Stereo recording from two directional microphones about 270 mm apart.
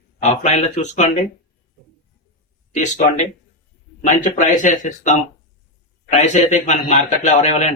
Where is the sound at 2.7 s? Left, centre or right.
Left.